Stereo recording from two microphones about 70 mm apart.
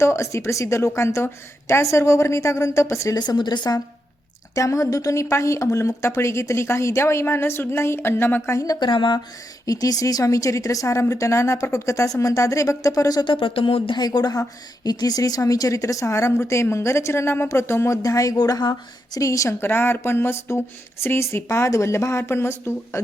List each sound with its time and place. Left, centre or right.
0.0 s speech: left
3.2 s speech: left
4.5 s speech: left
8.5 s speech: left
9.6 s speech: left
13.9 s speech: left
18.3 s speech: left
19.5 s speech: left